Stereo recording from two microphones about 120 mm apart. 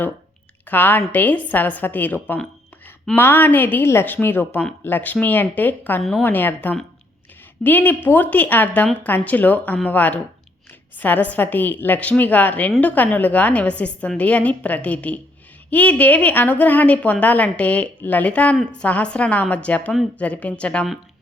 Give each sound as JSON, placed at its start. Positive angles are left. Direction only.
{"t": 0.7, "sound": "a woman's voice", "side_deg": 15}
{"t": 6.0, "sound": "a woman's voice", "side_deg": 0}
{"t": 6.2, "sound": "a woman's voice", "side_deg": 15}